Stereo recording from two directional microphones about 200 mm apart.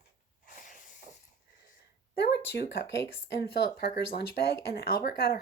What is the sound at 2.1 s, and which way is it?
Speech, 55° left (ahead or behind).